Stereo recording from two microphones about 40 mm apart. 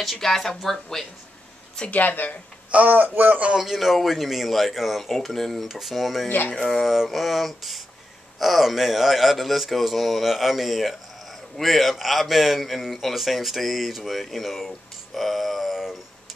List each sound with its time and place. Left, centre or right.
0.0 s speech: centre
1.9 s speech: left
2.7 s speech: right
3.5 s speech: centre
5.7 s speech: centre
15.8 s a sound: centre